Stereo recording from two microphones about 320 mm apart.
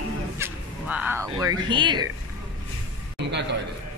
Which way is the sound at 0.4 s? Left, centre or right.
Centre.